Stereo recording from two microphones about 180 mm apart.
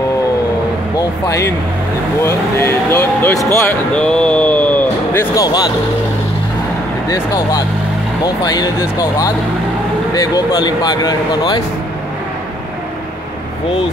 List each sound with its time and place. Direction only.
0.9 s a sound: 20° left (ahead or behind)
2.2 s speech: 15° left (ahead or behind)
8.2 s speech: 20° left (ahead or behind)